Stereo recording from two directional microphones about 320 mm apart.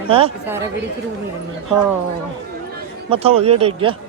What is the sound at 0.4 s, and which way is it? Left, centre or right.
Speech, centre.